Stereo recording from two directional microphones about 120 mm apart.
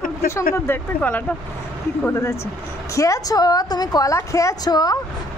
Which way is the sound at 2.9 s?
25° left (ahead or behind).